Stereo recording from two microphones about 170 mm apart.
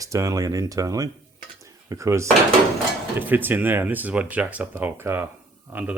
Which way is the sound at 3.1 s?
10° right (ahead or behind).